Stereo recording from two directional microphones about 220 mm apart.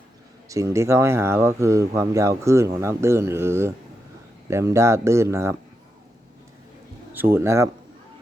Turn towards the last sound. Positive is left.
turn(degrees=-10)  # may be behind; listen again after turning